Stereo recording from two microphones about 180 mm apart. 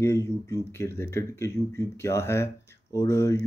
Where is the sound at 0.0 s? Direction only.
15° left (ahead or behind).